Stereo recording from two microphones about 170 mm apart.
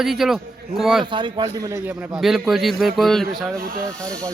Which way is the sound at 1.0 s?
30° right (ahead or behind).